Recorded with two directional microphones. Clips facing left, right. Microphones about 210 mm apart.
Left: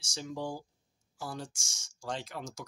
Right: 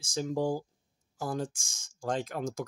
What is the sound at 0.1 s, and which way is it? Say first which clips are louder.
Speech: right 8 dB; 45° right (ahead or behind).